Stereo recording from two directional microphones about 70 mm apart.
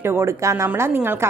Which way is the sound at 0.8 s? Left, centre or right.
Right.